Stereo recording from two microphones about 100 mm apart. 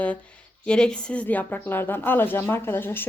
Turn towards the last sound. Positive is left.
turn(degrees=20)  # may be behind; listen again after turning